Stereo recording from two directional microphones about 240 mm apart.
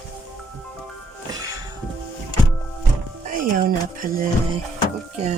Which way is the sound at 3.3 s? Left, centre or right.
Right.